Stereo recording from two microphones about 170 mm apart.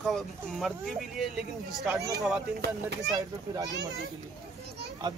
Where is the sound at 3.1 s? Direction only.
20° right (ahead or behind).